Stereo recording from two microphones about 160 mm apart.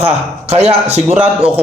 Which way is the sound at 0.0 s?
40° right (ahead or behind).